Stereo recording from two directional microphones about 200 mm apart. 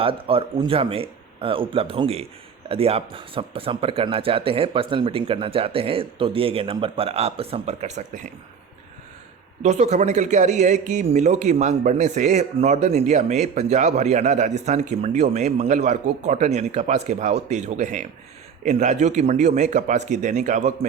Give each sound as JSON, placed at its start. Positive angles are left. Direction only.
{"t": 0.0, "sound": "speech", "side_deg": -25}
{"t": 9.6, "sound": "speech", "side_deg": -35}